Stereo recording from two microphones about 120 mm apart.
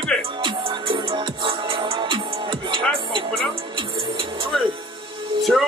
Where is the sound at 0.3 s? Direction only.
40° right (ahead or behind).